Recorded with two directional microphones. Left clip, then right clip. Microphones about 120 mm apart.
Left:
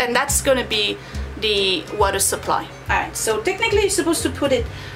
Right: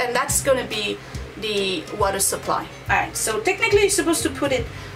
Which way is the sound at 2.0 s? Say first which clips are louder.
Left 2 dB; 20° left (ahead or behind).